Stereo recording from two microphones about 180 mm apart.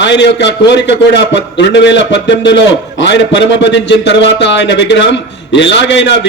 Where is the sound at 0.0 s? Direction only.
80° left.